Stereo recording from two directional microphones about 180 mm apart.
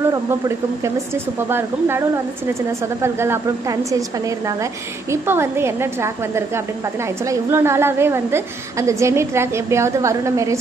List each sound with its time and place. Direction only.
1.5 s a woman's voice: 15° right (ahead or behind)
5.1 s a woman's voice: 15° right (ahead or behind)
7.2 s a woman's voice: 15° right (ahead or behind)